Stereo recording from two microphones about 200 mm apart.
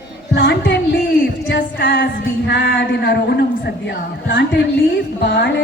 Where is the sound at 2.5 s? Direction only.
65° left (ahead or behind).